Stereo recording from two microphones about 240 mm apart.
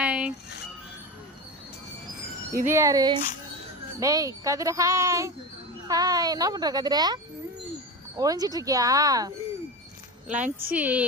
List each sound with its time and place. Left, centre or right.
0.0 s music: centre
2.6 s speech: centre
10.2 s speech: right
10.8 s speech: centre